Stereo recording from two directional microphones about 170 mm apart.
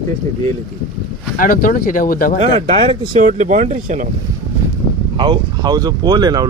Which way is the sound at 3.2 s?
45° right (ahead or behind).